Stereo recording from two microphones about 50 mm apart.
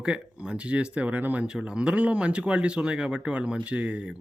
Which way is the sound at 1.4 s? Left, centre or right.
Centre.